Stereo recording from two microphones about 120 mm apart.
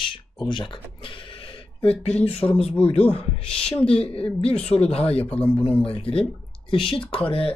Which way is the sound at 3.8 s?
55° left (ahead or behind).